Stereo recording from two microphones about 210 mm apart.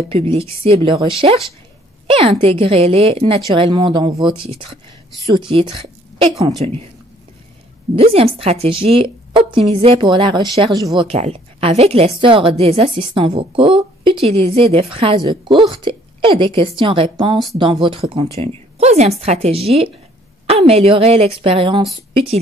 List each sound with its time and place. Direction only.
0.1 s a woman's voice: 25° right (ahead or behind)
2.0 s a woman's voice: 30° right (ahead or behind)
7.9 s a woman's voice: 30° right (ahead or behind)